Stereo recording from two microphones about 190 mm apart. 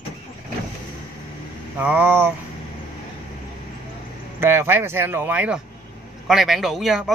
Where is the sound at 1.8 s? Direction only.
10° right (ahead or behind).